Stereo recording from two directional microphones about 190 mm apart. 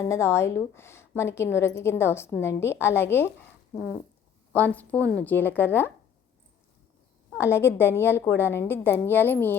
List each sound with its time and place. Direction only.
0.0 s a woman's voice: 15° left (ahead or behind)
7.3 s a woman's voice: 15° left (ahead or behind)